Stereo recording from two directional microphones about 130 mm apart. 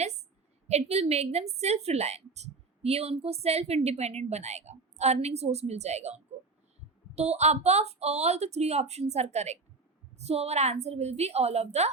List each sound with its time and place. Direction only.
0.7 s a woman's voice: 55° right (ahead or behind)